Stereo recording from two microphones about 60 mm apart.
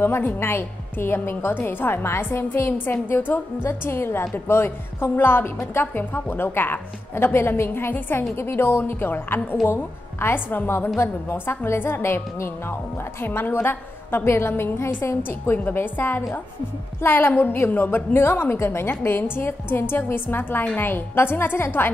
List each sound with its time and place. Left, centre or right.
0.0 s a woman's voice: left